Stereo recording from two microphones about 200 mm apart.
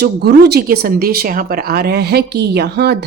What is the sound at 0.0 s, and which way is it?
Speech, 55° right (ahead or behind).